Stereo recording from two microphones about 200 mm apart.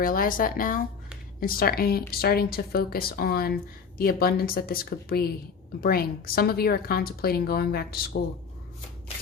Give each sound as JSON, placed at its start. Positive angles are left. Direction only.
{"t": 0.0, "sound": "speech", "side_deg": 45}